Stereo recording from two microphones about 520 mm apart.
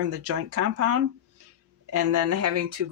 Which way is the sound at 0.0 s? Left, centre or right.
Right.